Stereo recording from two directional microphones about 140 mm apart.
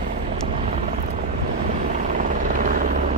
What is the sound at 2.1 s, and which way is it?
Helicopter, 70° right (ahead or behind).